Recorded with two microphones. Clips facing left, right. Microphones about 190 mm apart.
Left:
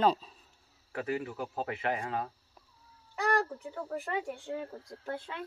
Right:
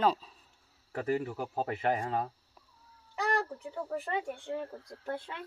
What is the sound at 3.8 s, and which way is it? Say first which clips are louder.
Speech: right 1 dB; centre (ahead or behind).